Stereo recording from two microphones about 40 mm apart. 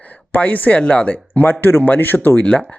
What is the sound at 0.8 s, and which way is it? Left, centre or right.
Speech, left.